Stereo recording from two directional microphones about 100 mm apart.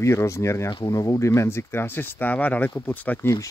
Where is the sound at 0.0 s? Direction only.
30° left (ahead or behind).